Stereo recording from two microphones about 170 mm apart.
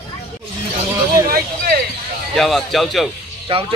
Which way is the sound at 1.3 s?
60° right (ahead or behind).